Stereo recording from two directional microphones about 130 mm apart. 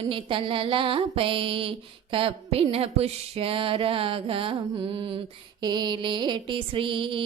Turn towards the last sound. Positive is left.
turn(degrees=-40)  # may be behind; listen again after turning